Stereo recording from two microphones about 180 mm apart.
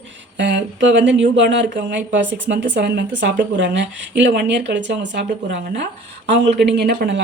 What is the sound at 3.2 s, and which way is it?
Speech, 80° right.